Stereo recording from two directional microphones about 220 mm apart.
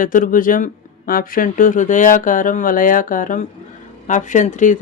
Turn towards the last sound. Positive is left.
turn(degrees=35)  # may be behind; listen again after turning